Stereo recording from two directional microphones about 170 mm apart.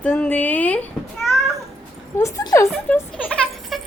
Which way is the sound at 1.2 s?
Centre (ahead or behind).